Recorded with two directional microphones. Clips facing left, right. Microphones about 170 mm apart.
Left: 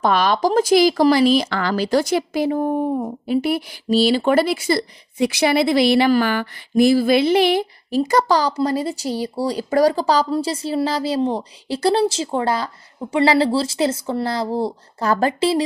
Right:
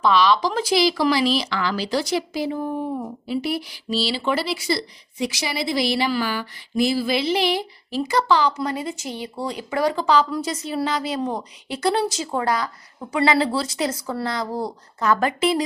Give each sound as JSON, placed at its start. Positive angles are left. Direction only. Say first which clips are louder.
{"t": 0.0, "sound": "speech", "louder": "left 1 dB", "side_deg": 50}